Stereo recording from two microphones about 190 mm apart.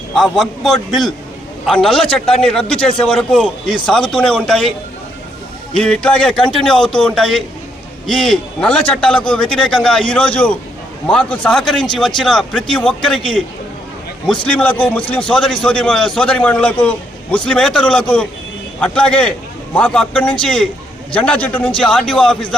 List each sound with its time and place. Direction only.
0.1 s a man's voice: centre (ahead or behind)
5.7 s a man's voice: 5° left (ahead or behind)